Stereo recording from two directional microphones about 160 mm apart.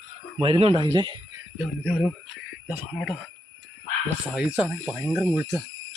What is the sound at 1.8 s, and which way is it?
Speech, 10° right (ahead or behind).